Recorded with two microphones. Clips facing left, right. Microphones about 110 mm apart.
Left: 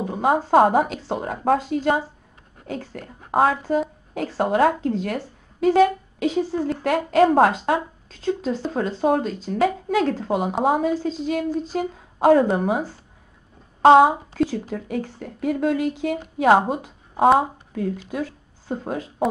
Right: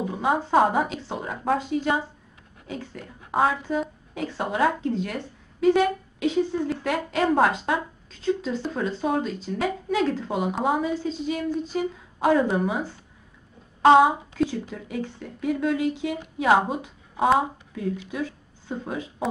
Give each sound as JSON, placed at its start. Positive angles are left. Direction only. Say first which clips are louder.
{"t": 0.0, "sound": "a woman's voice", "louder": "left 4 dB", "side_deg": 45}
{"t": 13.8, "sound": "a woman's voice", "louder": "left 3 dB", "side_deg": 45}